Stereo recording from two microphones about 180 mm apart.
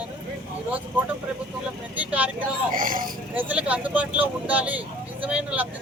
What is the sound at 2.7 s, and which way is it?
Speech, 50° right (ahead or behind).